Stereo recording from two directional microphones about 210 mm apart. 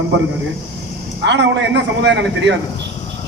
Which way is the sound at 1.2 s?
55° right (ahead or behind).